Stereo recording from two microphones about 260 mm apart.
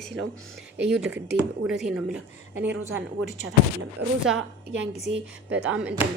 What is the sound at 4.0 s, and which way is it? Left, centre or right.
A woman's voice, right.